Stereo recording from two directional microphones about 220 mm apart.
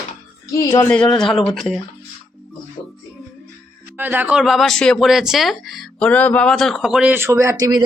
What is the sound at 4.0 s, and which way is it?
Speech, 10° right (ahead or behind).